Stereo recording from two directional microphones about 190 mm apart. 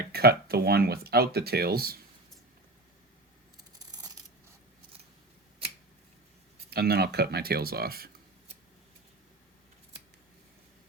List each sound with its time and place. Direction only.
0.1 s speech: 55° right (ahead or behind)
3.6 s coin: 20° right (ahead or behind)
6.7 s speech: 55° right (ahead or behind)